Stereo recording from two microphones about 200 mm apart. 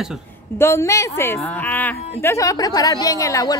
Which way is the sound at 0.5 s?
15° left (ahead or behind).